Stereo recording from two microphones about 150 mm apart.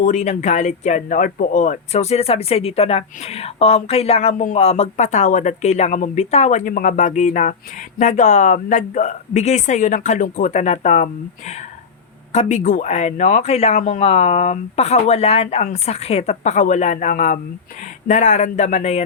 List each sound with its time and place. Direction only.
0.0 s speech: 50° left (ahead or behind)